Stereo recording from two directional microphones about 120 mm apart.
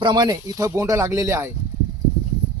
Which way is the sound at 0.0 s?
35° right (ahead or behind).